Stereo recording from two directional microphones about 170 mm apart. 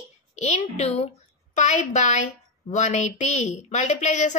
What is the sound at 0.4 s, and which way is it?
A child's voice, 45° left (ahead or behind).